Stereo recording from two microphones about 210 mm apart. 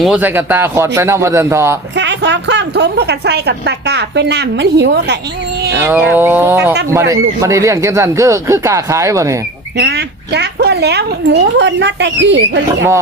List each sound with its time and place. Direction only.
0.0 s speech: 5° right (ahead or behind)
2.0 s a woman's voice: 55° right (ahead or behind)
5.7 s speech: 10° right (ahead or behind)
9.7 s a woman's voice: 55° right (ahead or behind)